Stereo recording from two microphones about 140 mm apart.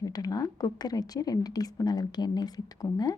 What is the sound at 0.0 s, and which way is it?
A woman's voice, 25° left (ahead or behind).